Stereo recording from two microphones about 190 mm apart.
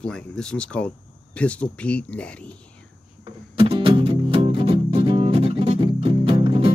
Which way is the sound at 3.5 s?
25° right (ahead or behind).